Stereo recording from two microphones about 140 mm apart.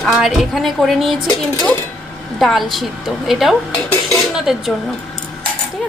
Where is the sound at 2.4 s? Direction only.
Centre (ahead or behind).